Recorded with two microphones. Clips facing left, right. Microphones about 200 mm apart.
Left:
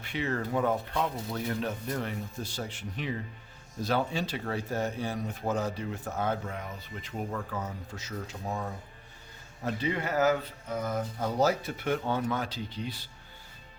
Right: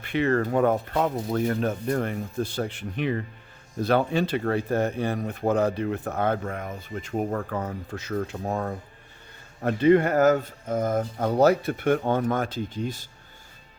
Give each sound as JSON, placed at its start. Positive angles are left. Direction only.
{"t": 0.0, "sound": "speech", "side_deg": -60}